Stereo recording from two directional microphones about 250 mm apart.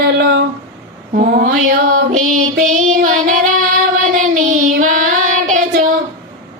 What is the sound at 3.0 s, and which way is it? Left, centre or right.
Child singing, right.